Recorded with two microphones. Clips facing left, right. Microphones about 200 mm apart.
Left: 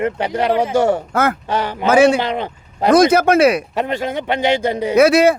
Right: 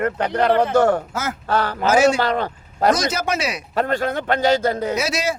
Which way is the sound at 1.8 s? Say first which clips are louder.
Left 4 dB; 60° left (ahead or behind).